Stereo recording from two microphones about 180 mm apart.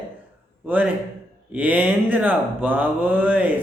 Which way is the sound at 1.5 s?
10° right (ahead or behind).